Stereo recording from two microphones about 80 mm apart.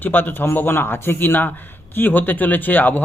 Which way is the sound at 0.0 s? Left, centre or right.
Left.